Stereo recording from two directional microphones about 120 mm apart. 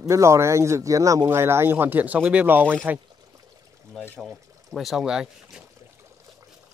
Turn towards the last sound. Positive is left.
turn(degrees=-5)  # may be behind; listen again after turning